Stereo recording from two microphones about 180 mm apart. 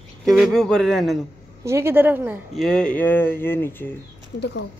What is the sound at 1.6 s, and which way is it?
Speech, 15° right (ahead or behind).